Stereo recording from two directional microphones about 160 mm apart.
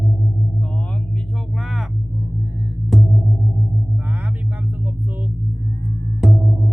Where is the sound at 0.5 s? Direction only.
10° left (ahead or behind).